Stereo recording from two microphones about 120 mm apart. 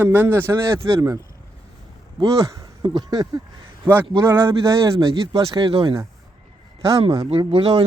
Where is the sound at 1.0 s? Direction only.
30° right (ahead or behind).